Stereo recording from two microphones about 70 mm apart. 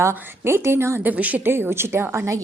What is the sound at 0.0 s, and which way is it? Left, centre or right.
A woman's voice, right.